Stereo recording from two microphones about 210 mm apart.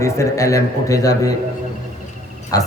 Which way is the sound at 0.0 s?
15° left (ahead or behind).